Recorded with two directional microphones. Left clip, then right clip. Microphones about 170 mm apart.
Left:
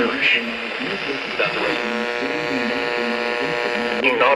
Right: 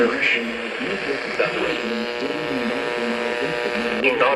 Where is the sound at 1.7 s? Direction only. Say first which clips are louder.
Left 2 dB; 20° left (ahead or behind).